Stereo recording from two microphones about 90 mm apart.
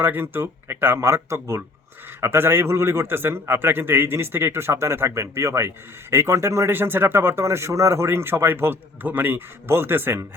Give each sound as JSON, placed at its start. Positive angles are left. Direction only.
{"t": 0.0, "sound": "a man's voice", "side_deg": -25}